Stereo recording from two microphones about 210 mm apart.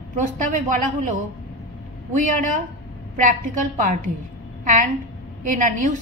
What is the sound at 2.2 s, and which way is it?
A woman's voice, 35° right (ahead or behind).